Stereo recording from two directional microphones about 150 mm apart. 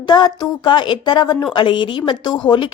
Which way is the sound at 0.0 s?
30° left (ahead or behind).